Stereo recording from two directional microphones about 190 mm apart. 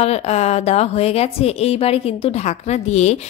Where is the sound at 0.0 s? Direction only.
35° left (ahead or behind).